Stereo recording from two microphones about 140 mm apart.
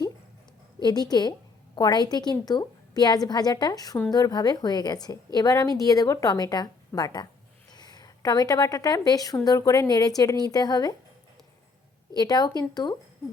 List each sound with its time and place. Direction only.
0.9 s a woman's voice: 30° left (ahead or behind)
12.1 s a woman's voice: 30° left (ahead or behind)